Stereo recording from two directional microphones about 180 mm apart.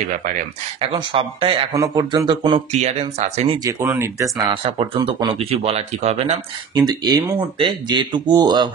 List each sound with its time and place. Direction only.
0.7 s speech: 30° right (ahead or behind)
2.8 s speech: 35° right (ahead or behind)
3.6 s speech: 15° right (ahead or behind); by 6.4 s 35° right (ahead or behind)
6.7 s speech: 25° right (ahead or behind)